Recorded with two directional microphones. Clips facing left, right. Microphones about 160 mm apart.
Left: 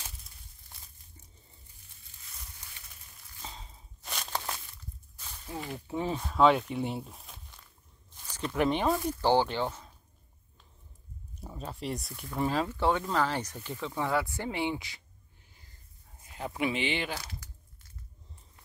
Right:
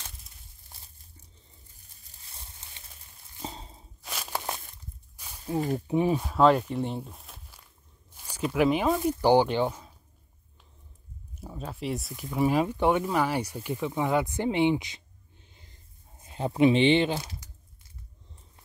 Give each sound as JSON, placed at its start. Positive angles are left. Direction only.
{"t": 2.0, "sound": "a sound", "side_deg": -30}
{"t": 4.0, "sound": "walk", "side_deg": -5}
{"t": 5.1, "sound": "a sound", "side_deg": -10}
{"t": 5.6, "sound": "speech", "side_deg": -40}
{"t": 5.9, "sound": "speech", "side_deg": -15}
{"t": 9.0, "sound": "speech", "side_deg": -15}
{"t": 11.3, "sound": "speech", "side_deg": 0}
{"t": 12.4, "sound": "speech", "side_deg": -15}